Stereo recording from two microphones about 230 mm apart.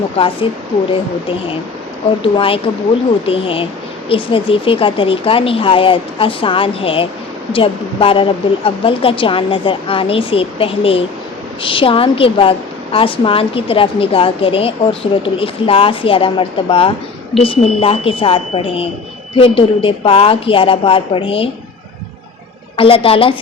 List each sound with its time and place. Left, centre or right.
0.4 s a woman's voice: left
22.8 s a woman's voice: left